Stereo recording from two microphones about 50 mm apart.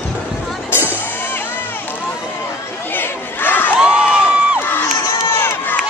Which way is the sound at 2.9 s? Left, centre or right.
Left.